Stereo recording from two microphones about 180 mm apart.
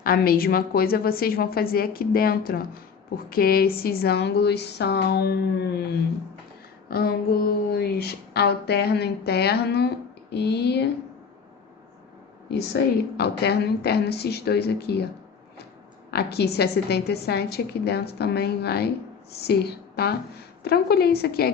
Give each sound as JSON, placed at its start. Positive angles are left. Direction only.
{"t": 0.0, "sound": "a woman's voice", "side_deg": 55}
{"t": 6.9, "sound": "a woman's voice", "side_deg": 55}
{"t": 12.5, "sound": "a woman's voice", "side_deg": 65}
{"t": 16.1, "sound": "a woman's voice", "side_deg": 65}